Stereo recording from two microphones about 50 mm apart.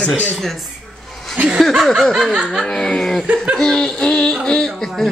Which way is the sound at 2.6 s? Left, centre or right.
Centre.